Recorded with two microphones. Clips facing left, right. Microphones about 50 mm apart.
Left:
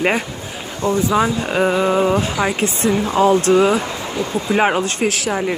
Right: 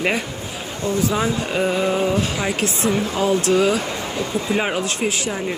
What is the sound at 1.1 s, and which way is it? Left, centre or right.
Speech, left.